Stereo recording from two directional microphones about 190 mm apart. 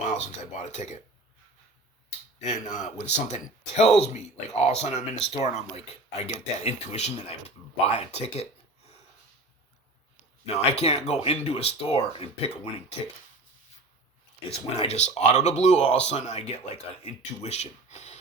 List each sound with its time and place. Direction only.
0.1 s speech: 35° left (ahead or behind)
2.4 s speech: 40° left (ahead or behind)
10.4 s speech: 35° left (ahead or behind)
14.7 s speech: 35° left (ahead or behind)